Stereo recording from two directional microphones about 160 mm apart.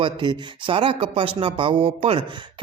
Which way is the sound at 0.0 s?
30° right (ahead or behind).